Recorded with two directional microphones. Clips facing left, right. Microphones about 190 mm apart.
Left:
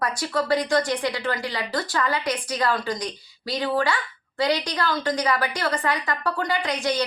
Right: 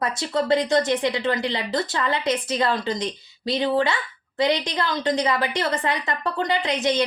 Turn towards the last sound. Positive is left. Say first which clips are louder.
# right 2 dB
turn(degrees=-20)  # may be behind; listen again after turning